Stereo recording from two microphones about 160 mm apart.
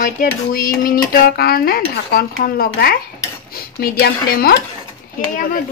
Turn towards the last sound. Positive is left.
turn(degrees=60)  # may be behind; listen again after turning